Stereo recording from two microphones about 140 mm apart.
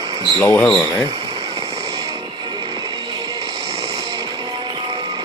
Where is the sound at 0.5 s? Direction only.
10° left (ahead or behind).